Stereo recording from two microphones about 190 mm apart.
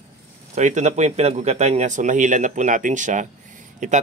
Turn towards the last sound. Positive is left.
turn(degrees=-40)  # may be behind; listen again after turning